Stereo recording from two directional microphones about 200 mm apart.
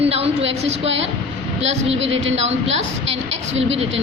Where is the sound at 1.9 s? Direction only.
70° right (ahead or behind).